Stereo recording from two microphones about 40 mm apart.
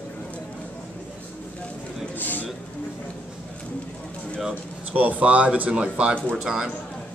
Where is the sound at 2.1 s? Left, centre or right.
Left.